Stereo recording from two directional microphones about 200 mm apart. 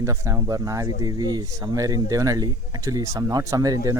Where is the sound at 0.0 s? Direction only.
15° right (ahead or behind).